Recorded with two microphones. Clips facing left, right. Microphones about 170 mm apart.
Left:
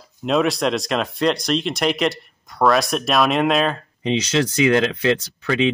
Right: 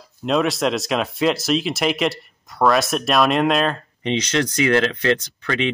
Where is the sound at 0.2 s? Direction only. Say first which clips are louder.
Left 1 dB; centre (ahead or behind).